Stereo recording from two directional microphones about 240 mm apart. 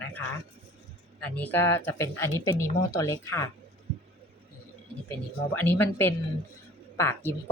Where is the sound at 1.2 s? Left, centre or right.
Centre.